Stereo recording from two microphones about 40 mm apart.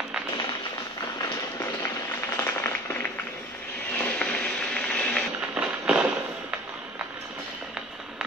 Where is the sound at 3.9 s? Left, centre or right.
Left.